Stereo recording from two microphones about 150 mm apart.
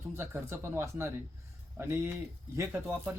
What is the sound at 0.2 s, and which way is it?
Speech, 15° right (ahead or behind).